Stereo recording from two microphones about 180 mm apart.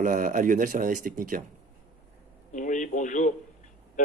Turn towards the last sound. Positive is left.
turn(degrees=45)  # may be behind; listen again after turning